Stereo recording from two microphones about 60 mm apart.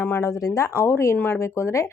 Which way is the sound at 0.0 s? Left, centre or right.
Left.